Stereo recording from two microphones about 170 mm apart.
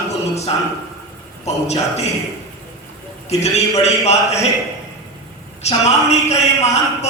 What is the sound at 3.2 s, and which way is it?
A man's voice, 40° left (ahead or behind).